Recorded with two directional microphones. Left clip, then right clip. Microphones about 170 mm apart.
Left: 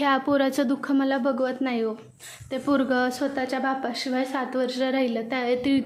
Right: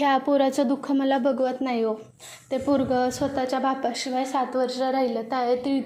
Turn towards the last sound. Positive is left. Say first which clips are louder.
# even
turn(degrees=20)  # may be behind; listen again after turning